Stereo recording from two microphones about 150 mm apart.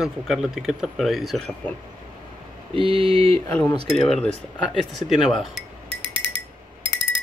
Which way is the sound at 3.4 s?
10° left (ahead or behind).